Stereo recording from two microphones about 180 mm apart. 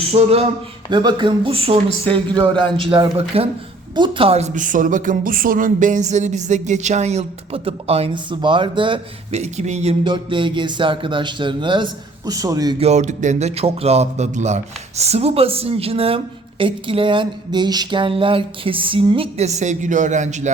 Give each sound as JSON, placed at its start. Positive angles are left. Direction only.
{"t": 0.1, "sound": "speech", "side_deg": -35}
{"t": 0.9, "sound": "speech", "side_deg": -25}
{"t": 10.0, "sound": "speech", "side_deg": -25}
{"t": 12.8, "sound": "speech", "side_deg": -40}